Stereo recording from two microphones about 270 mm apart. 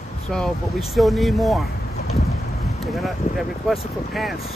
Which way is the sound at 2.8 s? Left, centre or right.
Centre.